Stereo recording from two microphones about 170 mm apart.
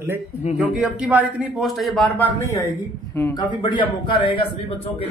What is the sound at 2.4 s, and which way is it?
A man's voice, 20° left (ahead or behind).